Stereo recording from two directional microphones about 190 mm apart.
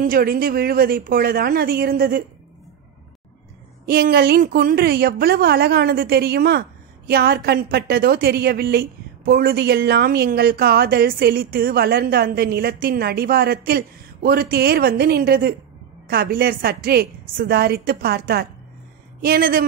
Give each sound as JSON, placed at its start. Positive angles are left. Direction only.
{"t": 0.0, "sound": "a woman's voice", "side_deg": -50}
{"t": 3.8, "sound": "a woman's voice", "side_deg": -55}